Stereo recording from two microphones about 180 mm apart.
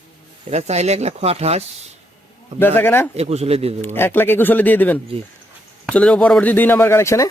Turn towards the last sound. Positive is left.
turn(degrees=15)  # may be behind; listen again after turning